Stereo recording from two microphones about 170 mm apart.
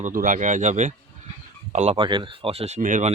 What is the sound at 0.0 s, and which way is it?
Speech, 50° right (ahead or behind).